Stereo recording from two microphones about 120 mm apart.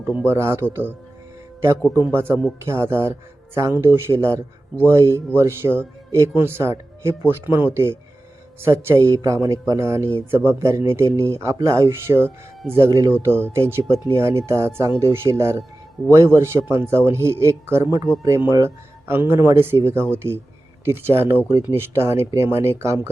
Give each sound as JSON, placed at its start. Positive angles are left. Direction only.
{"t": 0.2, "sound": "speech", "side_deg": -20}
{"t": 2.1, "sound": "speech", "side_deg": -20}